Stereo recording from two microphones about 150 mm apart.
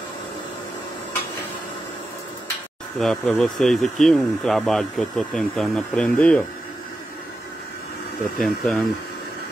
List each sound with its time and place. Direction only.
3.0 s speech: 5° left (ahead or behind)
8.4 s speech: centre (ahead or behind)